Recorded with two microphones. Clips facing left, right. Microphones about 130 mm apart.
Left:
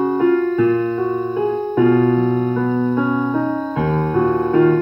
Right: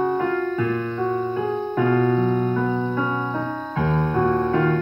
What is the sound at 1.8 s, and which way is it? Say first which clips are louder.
Keyboard: left 5 dB; 25° left (ahead or behind).